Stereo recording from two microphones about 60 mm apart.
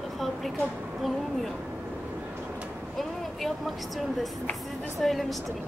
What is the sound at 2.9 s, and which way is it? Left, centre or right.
Speech, centre.